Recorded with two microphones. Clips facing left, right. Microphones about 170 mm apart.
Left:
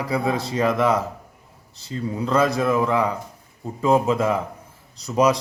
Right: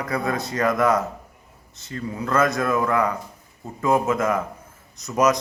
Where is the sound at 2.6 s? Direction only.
25° left (ahead or behind).